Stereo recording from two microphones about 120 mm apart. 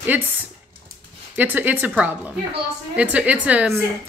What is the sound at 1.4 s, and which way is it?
Speech, 15° right (ahead or behind).